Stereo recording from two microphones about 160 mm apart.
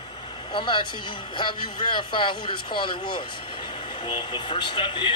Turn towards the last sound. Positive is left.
turn(degrees=30)  # may be behind; listen again after turning